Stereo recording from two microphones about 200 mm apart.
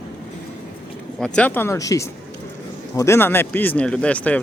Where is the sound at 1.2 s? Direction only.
5° left (ahead or behind).